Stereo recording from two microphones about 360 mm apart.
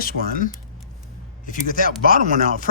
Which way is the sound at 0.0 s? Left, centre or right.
Left.